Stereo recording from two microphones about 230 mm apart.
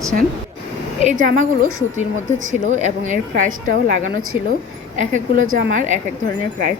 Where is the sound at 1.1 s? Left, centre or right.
Right.